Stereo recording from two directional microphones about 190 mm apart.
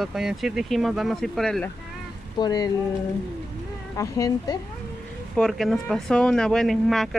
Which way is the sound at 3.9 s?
15° left (ahead or behind).